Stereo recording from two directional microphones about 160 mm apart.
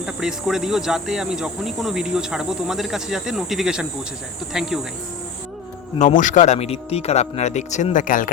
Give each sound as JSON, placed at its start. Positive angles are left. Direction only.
{"t": 0.0, "sound": "speech", "side_deg": -5}
{"t": 6.0, "sound": "speech", "side_deg": 50}